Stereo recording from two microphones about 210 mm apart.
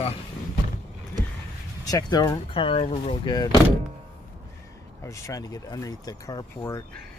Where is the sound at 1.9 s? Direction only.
20° left (ahead or behind).